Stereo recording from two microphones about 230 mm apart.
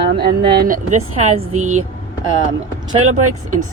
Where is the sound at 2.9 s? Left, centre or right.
Right.